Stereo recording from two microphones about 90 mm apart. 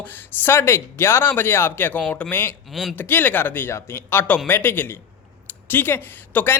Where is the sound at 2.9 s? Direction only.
20° left (ahead or behind).